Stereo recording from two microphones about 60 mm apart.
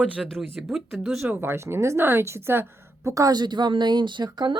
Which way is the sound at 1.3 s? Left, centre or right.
Right.